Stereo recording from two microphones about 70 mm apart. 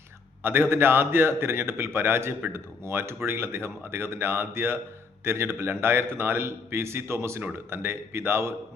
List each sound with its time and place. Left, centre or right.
0.4 s speech: right